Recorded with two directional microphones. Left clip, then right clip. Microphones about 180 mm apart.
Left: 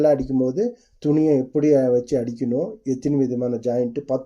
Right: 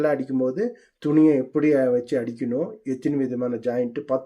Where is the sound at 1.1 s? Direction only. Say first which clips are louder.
Even; 10° right (ahead or behind).